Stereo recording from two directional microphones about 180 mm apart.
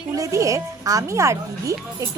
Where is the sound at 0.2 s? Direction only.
20° right (ahead or behind).